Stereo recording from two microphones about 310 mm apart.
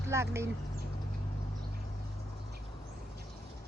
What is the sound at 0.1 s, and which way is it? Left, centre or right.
Speech, centre.